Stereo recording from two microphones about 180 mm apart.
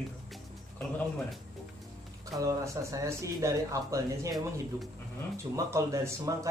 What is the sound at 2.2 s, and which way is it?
Speech, 20° right (ahead or behind).